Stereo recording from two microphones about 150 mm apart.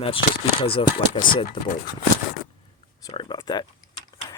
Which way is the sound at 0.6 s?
35° left (ahead or behind).